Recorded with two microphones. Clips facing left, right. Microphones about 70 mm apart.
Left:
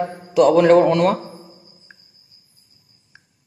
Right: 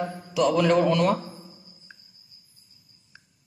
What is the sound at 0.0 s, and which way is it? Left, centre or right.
A man's voice, left.